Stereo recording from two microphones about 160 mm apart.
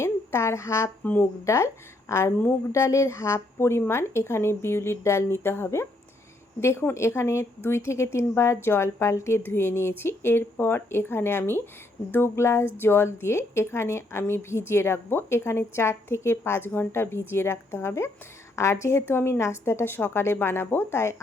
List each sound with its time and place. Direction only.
0.0 s a woman's voice: 15° left (ahead or behind)